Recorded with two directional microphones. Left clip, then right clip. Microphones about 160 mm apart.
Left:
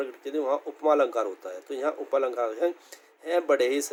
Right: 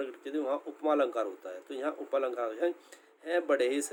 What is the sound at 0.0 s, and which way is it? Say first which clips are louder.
A man's voice: left 5 dB; 55° left (ahead or behind).